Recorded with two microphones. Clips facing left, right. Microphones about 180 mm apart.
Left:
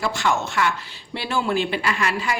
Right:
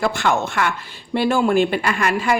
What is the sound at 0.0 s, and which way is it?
A woman's voice, 55° right (ahead or behind).